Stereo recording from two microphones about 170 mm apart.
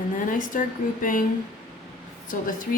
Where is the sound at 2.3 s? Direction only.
50° left (ahead or behind).